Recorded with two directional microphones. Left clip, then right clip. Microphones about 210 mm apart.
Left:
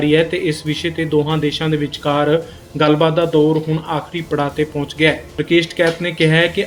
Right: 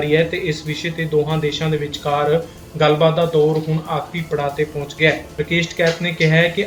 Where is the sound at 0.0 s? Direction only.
40° left (ahead or behind).